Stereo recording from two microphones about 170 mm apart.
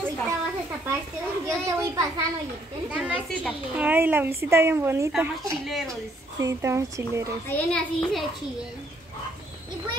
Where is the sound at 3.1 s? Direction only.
5° left (ahead or behind).